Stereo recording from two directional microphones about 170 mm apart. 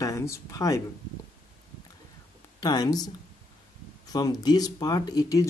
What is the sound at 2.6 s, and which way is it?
Speech, 25° left (ahead or behind).